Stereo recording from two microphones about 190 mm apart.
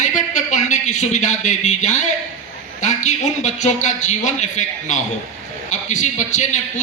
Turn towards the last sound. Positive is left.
turn(degrees=40)  # may be behind; listen again after turning